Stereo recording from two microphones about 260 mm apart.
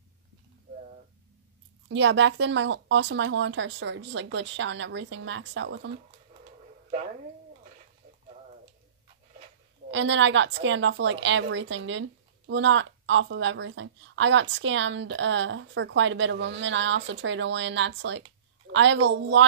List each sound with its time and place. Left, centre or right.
1.9 s a woman's voice: right
9.8 s a woman's voice: right